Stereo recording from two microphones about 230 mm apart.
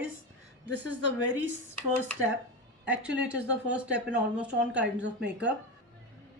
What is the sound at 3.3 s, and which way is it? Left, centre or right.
A woman's voice, right.